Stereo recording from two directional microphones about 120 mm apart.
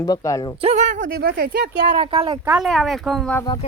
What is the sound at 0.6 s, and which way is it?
Speech, 70° right (ahead or behind).